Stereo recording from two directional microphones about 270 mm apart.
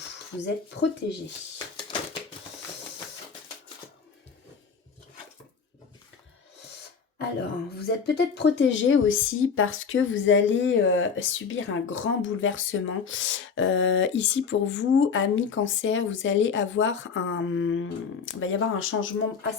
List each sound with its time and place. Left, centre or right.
0.4 s speech: left
7.8 s speech: left